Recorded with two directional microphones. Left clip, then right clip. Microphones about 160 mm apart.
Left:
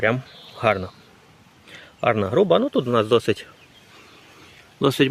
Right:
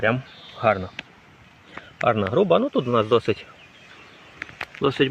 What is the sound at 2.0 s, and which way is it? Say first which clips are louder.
Speech: left 1 dB; 35° left (ahead or behind).